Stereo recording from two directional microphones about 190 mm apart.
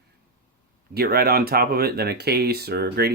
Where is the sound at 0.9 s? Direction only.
55° right (ahead or behind).